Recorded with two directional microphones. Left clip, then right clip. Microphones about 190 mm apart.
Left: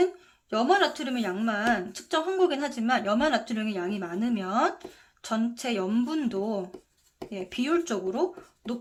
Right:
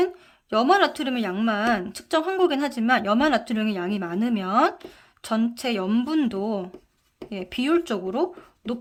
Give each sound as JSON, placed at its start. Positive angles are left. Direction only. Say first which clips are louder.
{"t": 0.5, "sound": "speech", "louder": "right 4 dB", "side_deg": -30}